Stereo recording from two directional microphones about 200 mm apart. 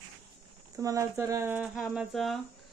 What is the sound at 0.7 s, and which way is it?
Speech, 15° right (ahead or behind).